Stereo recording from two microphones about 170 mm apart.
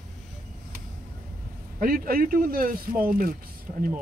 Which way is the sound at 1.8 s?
55° right (ahead or behind).